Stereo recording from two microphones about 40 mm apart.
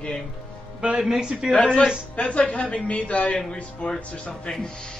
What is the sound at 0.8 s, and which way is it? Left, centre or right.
Speech, centre.